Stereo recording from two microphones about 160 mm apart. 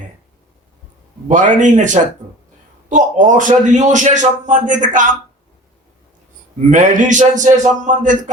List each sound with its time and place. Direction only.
1.3 s a man's voice: 50° right (ahead or behind)
6.7 s a man's voice: 50° right (ahead or behind)